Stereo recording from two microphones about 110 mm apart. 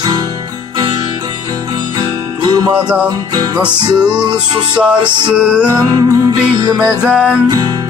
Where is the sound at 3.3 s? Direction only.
35° right (ahead or behind).